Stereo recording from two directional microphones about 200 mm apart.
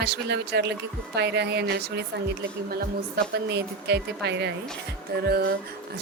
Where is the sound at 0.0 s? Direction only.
55° right (ahead or behind).